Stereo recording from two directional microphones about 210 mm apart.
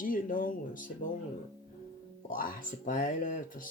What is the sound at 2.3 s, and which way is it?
Speech, 40° left (ahead or behind).